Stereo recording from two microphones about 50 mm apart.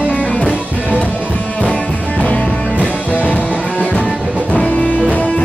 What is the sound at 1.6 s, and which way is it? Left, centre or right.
Music, left.